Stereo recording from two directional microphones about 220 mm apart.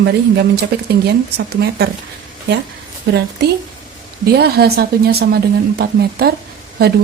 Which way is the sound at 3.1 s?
50° right (ahead or behind).